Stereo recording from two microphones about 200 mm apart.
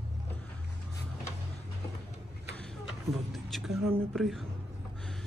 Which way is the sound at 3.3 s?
Centre (ahead or behind).